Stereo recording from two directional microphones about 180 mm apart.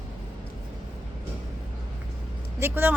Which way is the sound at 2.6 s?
10° right (ahead or behind).